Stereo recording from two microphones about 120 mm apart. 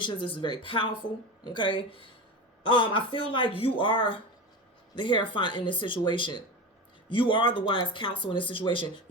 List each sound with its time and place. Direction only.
0.0 s speech: 40° left (ahead or behind)